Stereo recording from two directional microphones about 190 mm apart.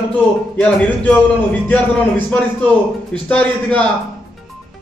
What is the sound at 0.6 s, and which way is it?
Speech, 5° left (ahead or behind).